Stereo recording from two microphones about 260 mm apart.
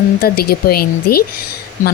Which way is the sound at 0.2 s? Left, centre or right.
Left.